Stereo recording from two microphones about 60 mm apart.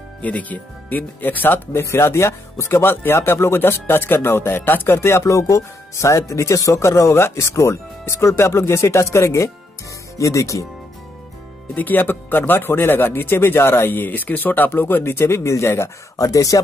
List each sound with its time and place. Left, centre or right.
0.2 s speech: left
11.7 s speech: left
16.2 s speech: left